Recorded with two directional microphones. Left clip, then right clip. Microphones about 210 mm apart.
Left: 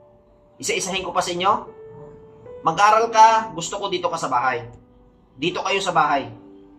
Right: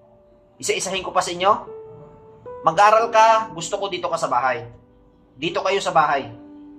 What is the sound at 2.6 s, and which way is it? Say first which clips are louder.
Speech: right 1 dB; 45° right (ahead or behind).